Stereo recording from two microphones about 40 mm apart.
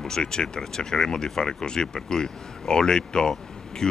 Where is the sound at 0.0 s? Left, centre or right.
Centre.